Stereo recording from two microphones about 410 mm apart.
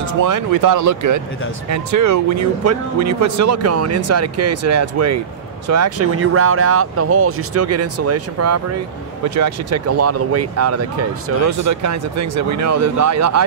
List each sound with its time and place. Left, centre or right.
0.0 s speech: right